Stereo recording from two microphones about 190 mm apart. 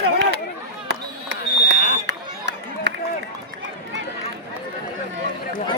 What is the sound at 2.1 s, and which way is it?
Run, 65° right (ahead or behind).